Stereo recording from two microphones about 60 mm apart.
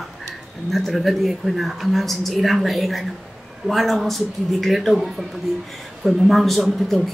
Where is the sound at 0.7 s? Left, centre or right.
Centre.